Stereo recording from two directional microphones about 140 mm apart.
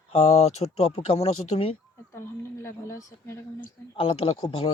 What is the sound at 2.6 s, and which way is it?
Speech, 20° left (ahead or behind).